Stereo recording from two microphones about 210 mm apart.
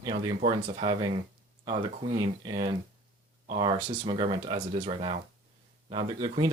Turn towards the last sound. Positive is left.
turn(degrees=-20)  # may be behind; listen again after turning